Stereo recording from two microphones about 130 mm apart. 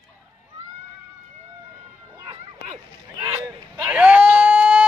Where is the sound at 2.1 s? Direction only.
30° right (ahead or behind).